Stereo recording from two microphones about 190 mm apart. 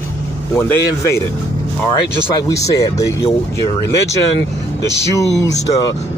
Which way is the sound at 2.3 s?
15° left (ahead or behind).